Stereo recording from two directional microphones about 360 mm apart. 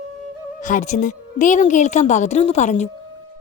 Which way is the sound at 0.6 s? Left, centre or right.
Left.